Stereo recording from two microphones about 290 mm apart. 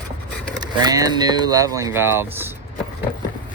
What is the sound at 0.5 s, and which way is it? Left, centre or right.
Speech, centre.